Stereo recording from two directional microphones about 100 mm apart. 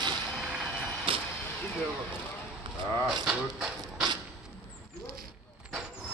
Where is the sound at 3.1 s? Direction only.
5° right (ahead or behind).